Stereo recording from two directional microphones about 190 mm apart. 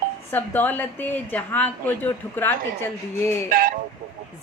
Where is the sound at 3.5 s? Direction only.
50° right (ahead or behind).